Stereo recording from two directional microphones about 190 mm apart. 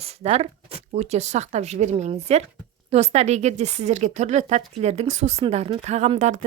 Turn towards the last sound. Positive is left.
turn(degrees=-40)  # may be behind; listen again after turning